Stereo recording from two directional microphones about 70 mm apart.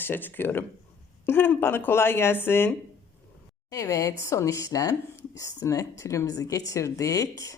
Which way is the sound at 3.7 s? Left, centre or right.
Left.